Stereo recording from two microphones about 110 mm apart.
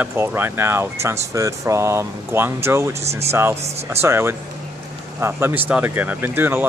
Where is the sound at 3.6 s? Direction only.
75° right (ahead or behind).